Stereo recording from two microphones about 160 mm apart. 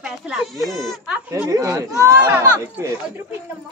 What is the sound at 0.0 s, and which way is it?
Speech, centre (ahead or behind).